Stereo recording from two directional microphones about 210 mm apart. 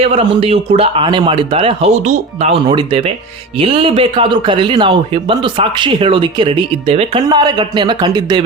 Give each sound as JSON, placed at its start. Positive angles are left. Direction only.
{"t": 0.0, "sound": "a man's voice", "side_deg": -30}